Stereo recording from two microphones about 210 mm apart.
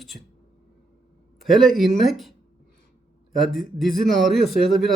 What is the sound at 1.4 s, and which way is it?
Speech, centre (ahead or behind).